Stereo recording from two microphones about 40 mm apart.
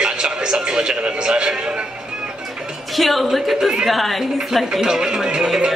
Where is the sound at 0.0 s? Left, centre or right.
Right.